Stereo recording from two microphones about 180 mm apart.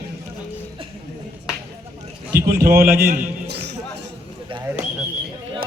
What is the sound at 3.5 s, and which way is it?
Music, 65° right (ahead or behind).